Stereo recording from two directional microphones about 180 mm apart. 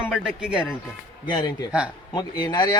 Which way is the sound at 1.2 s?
25° left (ahead or behind).